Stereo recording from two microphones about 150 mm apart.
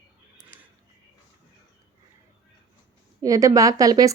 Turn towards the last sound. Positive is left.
turn(degrees=-25)  # may be behind; listen again after turning